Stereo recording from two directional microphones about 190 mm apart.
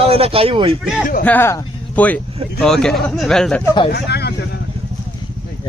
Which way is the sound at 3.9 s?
60° left (ahead or behind).